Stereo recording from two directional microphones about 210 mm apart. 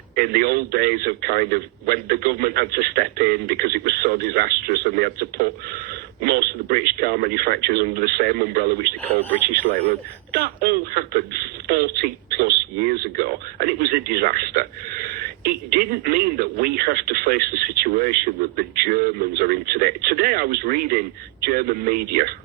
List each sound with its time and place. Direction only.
0.2 s speech: 45° right (ahead or behind)
9.3 s speech: 10° left (ahead or behind)
10.3 s speech: 45° right (ahead or behind)
12.4 s speech: 45° right (ahead or behind)
15.7 s speech: 45° right (ahead or behind)